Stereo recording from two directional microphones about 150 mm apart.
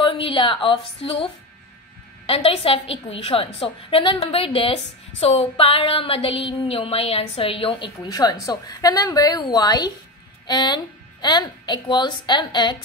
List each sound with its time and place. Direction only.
0.0 s a woman's voice: 35° left (ahead or behind)
8.1 s speech: 25° left (ahead or behind)